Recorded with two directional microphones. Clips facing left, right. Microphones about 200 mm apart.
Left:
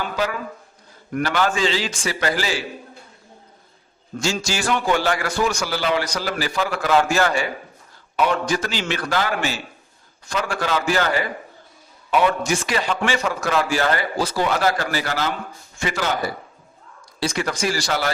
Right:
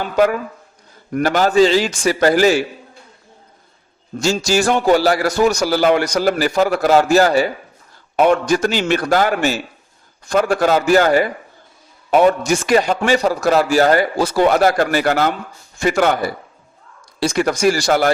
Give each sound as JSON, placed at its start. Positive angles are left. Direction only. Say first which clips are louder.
{"t": 0.0, "sound": "a man's voice", "louder": "right 9 dB", "side_deg": -45}
{"t": 4.2, "sound": "a man's voice", "louder": "right 8 dB", "side_deg": -40}
{"t": 8.2, "sound": "a man's voice", "louder": "right 7 dB", "side_deg": -50}
{"t": 17.2, "sound": "a man's voice", "louder": "right 6 dB", "side_deg": -45}